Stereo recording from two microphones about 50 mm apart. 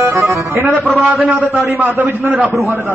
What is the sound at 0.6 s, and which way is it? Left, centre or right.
Speech, right.